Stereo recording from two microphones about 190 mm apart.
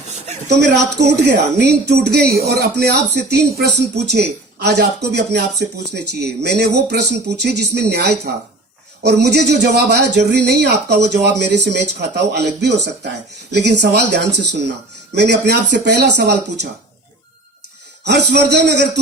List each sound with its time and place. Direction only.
0.1 s a sound: 35° right (ahead or behind)
1.2 s speech: 65° right (ahead or behind)
18.0 s speech: 65° right (ahead or behind)